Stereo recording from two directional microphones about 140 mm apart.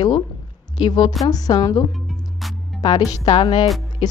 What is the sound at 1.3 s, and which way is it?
A woman's voice, 30° left (ahead or behind).